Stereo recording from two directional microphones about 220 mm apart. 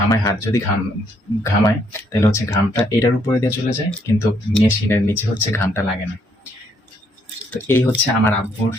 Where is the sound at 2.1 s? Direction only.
15° left (ahead or behind).